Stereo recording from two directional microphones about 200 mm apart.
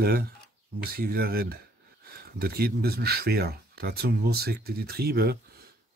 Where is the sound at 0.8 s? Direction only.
50° right (ahead or behind).